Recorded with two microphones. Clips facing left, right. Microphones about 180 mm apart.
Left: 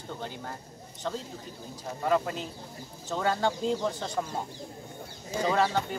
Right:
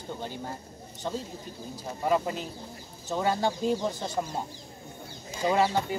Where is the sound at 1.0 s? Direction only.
15° right (ahead or behind).